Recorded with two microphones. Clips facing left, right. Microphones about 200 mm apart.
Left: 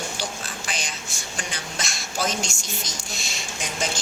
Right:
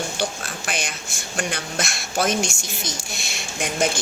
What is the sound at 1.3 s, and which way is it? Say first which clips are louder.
Speech: right 8 dB; 60° right (ahead or behind).